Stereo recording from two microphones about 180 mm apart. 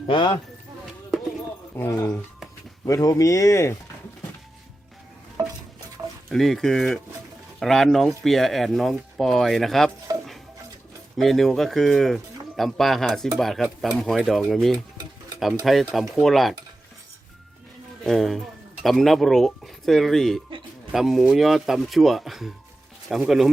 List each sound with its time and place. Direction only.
0.1 s speech: 25° left (ahead or behind)
1.7 s speech: 15° left (ahead or behind)
6.2 s speech: centre (ahead or behind)
11.2 s speech: centre (ahead or behind)
18.0 s speech: centre (ahead or behind)